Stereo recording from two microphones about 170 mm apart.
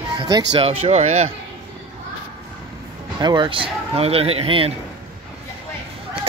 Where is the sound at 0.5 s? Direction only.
35° right (ahead or behind).